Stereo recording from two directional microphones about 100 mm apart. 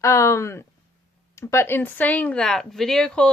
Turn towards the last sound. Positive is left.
turn(degrees=5)  # may be behind; listen again after turning